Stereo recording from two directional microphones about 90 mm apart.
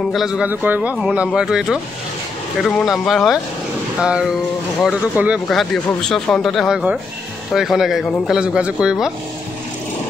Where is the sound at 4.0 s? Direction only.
10° right (ahead or behind).